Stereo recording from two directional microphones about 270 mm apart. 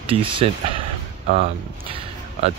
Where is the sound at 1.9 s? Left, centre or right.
Centre.